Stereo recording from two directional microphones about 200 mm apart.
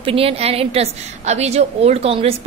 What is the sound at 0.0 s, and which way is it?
A woman's voice, 30° right (ahead or behind).